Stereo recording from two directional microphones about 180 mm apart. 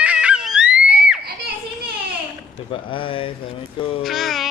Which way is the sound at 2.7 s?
30° left (ahead or behind).